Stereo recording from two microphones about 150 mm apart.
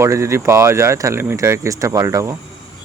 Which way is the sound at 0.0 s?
20° right (ahead or behind).